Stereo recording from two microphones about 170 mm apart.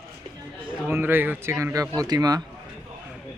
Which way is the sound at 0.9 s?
10° right (ahead or behind).